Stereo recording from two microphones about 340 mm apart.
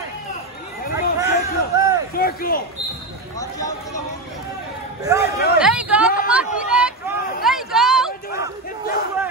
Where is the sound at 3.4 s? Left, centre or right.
Centre.